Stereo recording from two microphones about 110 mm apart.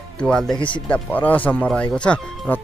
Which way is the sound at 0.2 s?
5° left (ahead or behind).